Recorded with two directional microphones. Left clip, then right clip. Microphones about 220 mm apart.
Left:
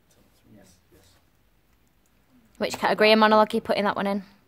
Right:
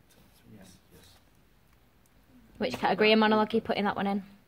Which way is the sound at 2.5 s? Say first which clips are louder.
Left 4 dB; 20° left (ahead or behind).